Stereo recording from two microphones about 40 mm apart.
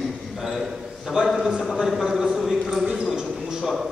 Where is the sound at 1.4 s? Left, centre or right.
Centre.